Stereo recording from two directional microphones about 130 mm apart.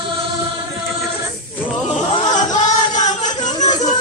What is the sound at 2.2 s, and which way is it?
Music, 70° left (ahead or behind).